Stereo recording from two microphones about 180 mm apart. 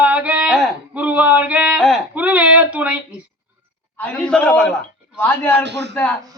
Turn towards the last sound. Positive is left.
turn(degrees=-70)  # may be behind; listen again after turning